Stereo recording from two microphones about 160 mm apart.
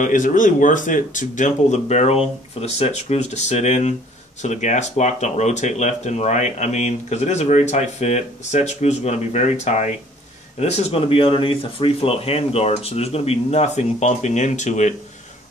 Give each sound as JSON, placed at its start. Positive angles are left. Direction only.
{"t": 0.0, "sound": "speech", "side_deg": 55}